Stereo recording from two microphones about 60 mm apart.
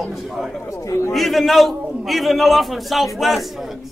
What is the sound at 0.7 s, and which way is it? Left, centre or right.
Speech, left.